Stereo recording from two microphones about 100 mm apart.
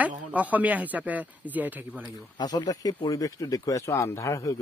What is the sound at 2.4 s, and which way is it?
Speech, 45° left (ahead or behind).